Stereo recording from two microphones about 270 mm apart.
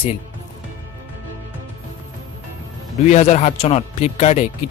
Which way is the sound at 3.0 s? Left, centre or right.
Left.